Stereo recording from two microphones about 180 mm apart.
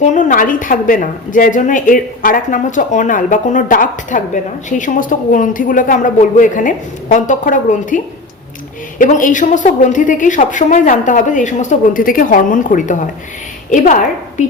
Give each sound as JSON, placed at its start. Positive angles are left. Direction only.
{"t": 0.0, "sound": "a woman's voice", "side_deg": 45}